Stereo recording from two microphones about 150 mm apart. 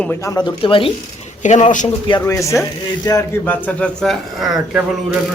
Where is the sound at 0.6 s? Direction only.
35° left (ahead or behind).